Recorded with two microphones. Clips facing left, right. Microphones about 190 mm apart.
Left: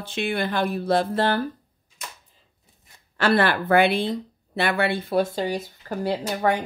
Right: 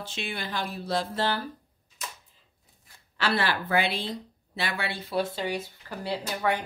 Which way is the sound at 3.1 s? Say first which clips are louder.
Left 7 dB; 50° left (ahead or behind).